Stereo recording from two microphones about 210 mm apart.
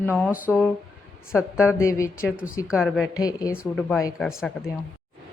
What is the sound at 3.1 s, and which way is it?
Speech, 15° left (ahead or behind).